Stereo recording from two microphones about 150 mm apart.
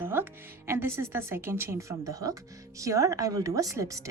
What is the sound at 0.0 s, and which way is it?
Music, 15° right (ahead or behind).